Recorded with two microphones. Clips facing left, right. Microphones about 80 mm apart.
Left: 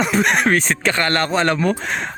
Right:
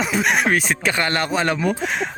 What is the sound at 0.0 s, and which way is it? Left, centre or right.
Speech, centre.